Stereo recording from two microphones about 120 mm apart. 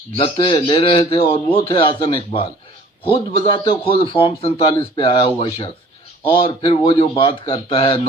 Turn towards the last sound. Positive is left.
turn(degrees=55)  # may be behind; listen again after turning